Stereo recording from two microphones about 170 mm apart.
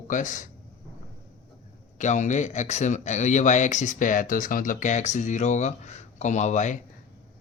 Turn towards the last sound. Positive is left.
turn(degrees=45)  # may be behind; listen again after turning